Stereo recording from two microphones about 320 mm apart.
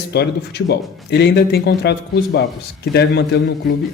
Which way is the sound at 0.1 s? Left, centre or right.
Left.